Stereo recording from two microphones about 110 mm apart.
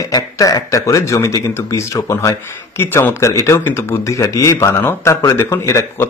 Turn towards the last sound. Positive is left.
turn(degrees=25)  # may be behind; listen again after turning